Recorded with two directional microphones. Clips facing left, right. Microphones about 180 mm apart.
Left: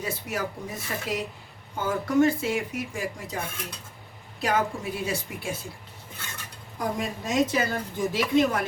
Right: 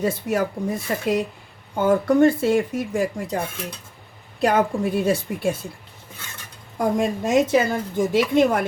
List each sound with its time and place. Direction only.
0.0 s a woman's voice: 55° right (ahead or behind)
4.4 s speech: 55° right (ahead or behind)
6.7 s a woman's voice: 50° right (ahead or behind)